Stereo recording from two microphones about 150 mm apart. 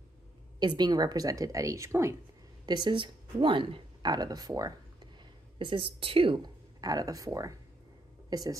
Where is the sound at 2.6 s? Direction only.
30° right (ahead or behind).